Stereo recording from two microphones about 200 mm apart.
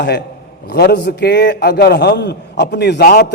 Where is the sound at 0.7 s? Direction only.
55° left (ahead or behind).